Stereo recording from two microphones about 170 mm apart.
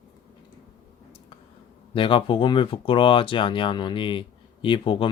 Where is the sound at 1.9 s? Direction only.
30° left (ahead or behind).